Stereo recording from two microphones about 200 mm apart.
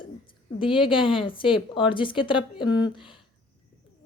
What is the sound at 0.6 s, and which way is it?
A woman's voice, 25° left (ahead or behind).